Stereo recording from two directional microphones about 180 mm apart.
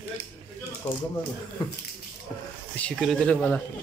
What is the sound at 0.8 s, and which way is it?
Speech, 35° left (ahead or behind).